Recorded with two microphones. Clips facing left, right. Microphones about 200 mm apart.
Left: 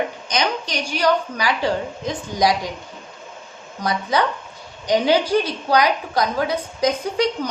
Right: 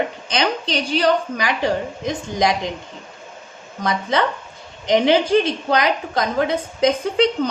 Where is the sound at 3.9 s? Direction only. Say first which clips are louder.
Right 1 dB; 25° right (ahead or behind).